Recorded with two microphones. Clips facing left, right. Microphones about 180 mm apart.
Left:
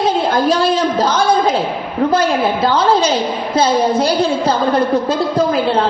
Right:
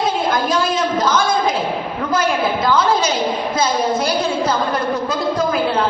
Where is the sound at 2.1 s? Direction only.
30° left (ahead or behind).